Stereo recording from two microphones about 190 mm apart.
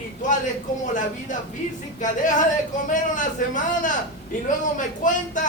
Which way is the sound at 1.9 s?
40° left (ahead or behind).